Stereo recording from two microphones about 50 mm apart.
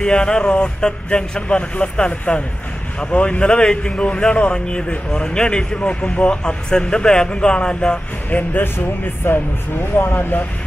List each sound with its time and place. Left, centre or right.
0.0 s speech: centre
8.3 s speech: left
8.7 s speech: left